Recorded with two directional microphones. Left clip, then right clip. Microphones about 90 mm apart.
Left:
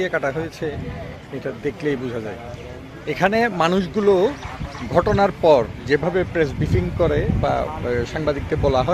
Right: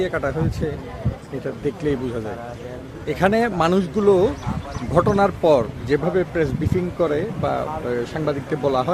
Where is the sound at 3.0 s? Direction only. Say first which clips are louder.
Even; 10° right (ahead or behind).